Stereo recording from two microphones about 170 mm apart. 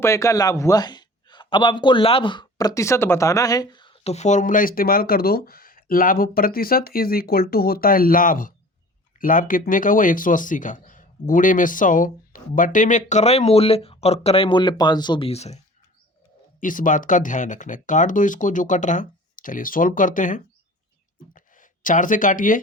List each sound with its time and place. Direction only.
0.0 s speech: 15° left (ahead or behind); by 15.6 s 40° left (ahead or behind)
16.6 s speech: 50° left (ahead or behind)
21.3 s a sound: 50° left (ahead or behind)